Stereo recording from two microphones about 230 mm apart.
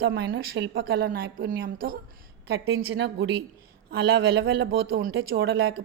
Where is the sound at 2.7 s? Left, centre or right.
Right.